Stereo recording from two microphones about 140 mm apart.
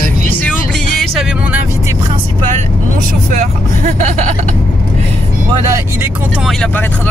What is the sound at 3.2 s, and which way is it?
Vehicle, 60° right (ahead or behind).